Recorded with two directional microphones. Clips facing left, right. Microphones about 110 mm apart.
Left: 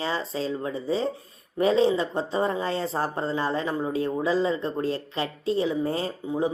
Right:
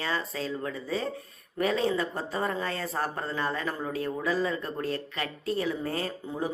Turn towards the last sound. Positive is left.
turn(degrees=25)  # may be behind; listen again after turning